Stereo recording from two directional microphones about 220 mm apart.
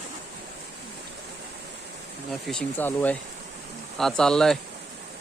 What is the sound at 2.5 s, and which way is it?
Speech, 5° left (ahead or behind).